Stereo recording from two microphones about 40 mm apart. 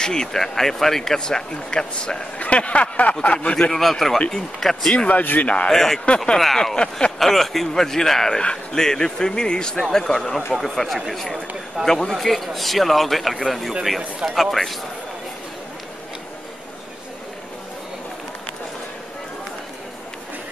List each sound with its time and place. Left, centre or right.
0.0 s speech: centre
2.3 s speech: left
3.7 s speech: centre
4.9 s speech: left
5.2 s speech: left
5.7 s speech: centre
6.0 s speech: left
6.3 s speech: centre
6.7 s speech: left
7.2 s a man's voice: centre
11.8 s a man's voice: right
12.1 s a man's voice: centre